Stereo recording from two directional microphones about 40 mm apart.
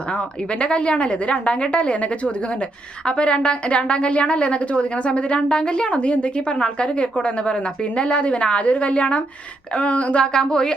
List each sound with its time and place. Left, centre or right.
0.1 s a woman's voice: left
10.3 s speech: centre